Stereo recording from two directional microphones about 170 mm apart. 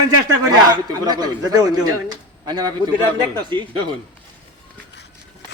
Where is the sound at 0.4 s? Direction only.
20° right (ahead or behind).